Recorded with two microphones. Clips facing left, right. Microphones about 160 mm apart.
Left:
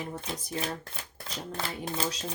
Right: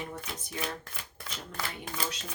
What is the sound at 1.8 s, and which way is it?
Speech, 35° left (ahead or behind).